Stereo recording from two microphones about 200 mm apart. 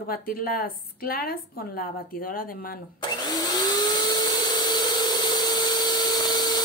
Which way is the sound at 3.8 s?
20° left (ahead or behind).